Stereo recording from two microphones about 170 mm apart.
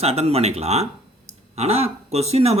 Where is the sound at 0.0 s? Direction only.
35° right (ahead or behind).